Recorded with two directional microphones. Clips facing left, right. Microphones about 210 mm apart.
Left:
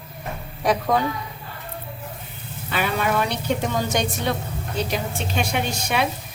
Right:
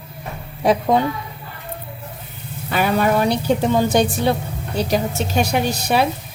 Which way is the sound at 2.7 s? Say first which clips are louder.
Right 6 dB; 45° right (ahead or behind).